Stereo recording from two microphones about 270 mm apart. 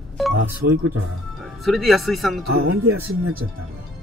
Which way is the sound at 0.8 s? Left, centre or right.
Right.